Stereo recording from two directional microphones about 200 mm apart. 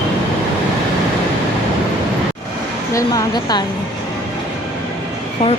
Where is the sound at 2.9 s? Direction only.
20° left (ahead or behind).